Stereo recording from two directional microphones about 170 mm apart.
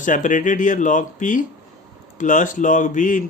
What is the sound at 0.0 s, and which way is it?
Speech, 50° left (ahead or behind).